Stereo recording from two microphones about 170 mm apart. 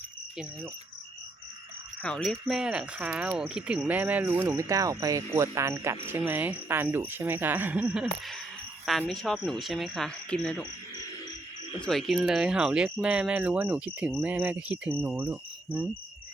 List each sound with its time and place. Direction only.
2.0 s speech: 5° left (ahead or behind)
8.9 s speech: 5° left (ahead or behind)
11.8 s speech: centre (ahead or behind)